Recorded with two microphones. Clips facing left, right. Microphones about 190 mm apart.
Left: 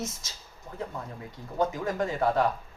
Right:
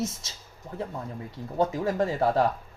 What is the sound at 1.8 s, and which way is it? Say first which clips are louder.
Speech: right 2 dB; 35° right (ahead or behind).